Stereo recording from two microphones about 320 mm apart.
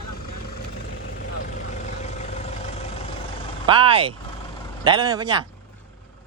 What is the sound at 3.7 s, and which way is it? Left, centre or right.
Speech, centre.